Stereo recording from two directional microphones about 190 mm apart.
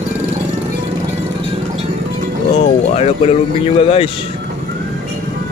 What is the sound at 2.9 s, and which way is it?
Speech, 35° left (ahead or behind).